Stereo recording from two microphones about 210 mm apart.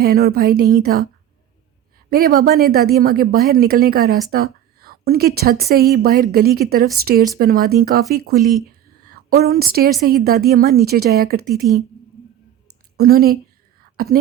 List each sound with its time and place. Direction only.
0.0 s a woman's voice: 45° right (ahead or behind)
2.0 s a woman's voice: 45° right (ahead or behind)
9.0 s a woman's voice: 50° right (ahead or behind)
13.0 s a woman's voice: 45° right (ahead or behind)